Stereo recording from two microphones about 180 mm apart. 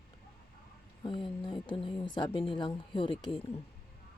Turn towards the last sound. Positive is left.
turn(degrees=25)  # may be behind; listen again after turning